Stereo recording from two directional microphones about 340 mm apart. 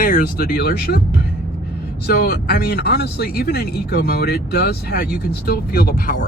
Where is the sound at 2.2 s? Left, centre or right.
Left.